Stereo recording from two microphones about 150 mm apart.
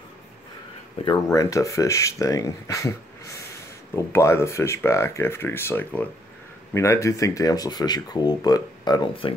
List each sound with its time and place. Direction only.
1.0 s speech: 20° left (ahead or behind)